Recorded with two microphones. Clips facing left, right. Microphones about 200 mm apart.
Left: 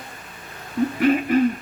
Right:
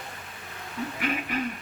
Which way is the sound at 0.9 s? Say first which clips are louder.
Left 13 dB; 40° left (ahead or behind).